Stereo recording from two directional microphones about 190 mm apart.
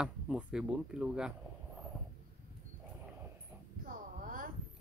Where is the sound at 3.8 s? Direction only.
45° right (ahead or behind).